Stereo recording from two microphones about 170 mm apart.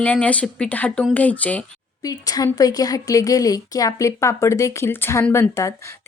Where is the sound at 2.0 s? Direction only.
20° left (ahead or behind).